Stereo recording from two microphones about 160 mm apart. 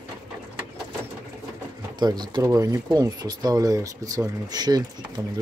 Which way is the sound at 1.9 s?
25° right (ahead or behind).